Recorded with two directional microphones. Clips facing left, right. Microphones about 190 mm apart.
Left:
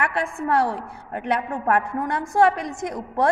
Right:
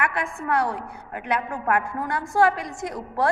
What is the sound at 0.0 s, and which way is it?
A woman's voice, 30° left (ahead or behind).